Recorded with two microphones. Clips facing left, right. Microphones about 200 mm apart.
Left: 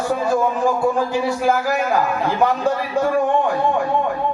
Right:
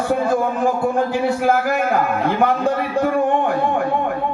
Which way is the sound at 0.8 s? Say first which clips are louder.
Even; 60° right (ahead or behind).